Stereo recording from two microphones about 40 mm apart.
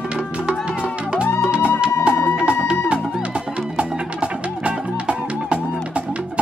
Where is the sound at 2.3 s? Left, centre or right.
Right.